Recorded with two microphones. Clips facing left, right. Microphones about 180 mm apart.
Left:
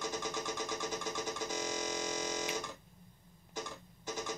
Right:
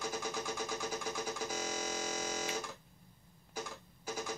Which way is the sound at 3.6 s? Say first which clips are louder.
Even; 20° left (ahead or behind).